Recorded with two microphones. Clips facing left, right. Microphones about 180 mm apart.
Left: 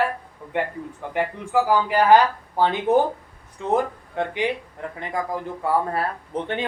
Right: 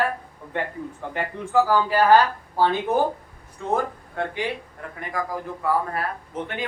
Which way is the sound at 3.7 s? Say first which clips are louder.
Left 3 dB; 20° left (ahead or behind).